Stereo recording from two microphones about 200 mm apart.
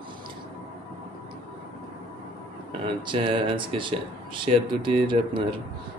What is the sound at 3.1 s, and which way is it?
Speech, 25° right (ahead or behind).